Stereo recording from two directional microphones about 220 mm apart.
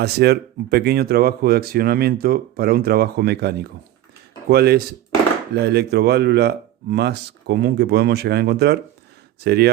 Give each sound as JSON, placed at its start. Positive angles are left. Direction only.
{"t": 0.0, "sound": "speech", "side_deg": -45}